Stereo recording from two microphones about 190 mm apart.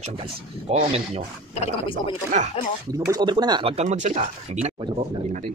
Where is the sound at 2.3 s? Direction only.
40° right (ahead or behind).